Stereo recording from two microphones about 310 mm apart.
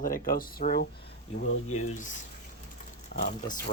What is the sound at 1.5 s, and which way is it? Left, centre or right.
Speech, left.